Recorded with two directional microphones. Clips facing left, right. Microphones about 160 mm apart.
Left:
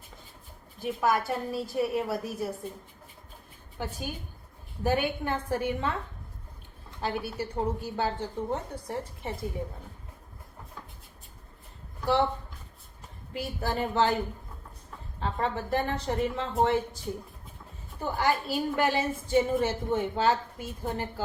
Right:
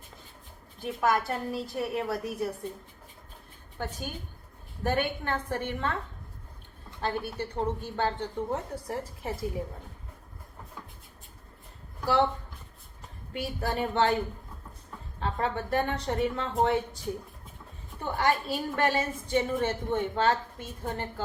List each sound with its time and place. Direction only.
0.8 s a woman's voice: centre (ahead or behind)
3.8 s a woman's voice: 10° left (ahead or behind)
7.0 s a woman's voice: 5° left (ahead or behind)
13.3 s a woman's voice: centre (ahead or behind)
15.2 s a woman's voice: centre (ahead or behind)